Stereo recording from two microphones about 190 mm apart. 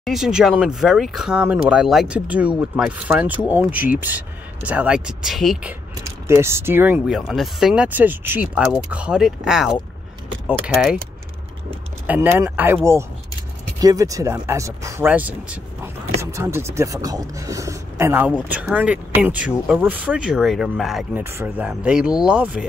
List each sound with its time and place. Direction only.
0.0 s speech: centre (ahead or behind)
6.0 s speech: 15° right (ahead or behind)
12.1 s speech: 10° right (ahead or behind)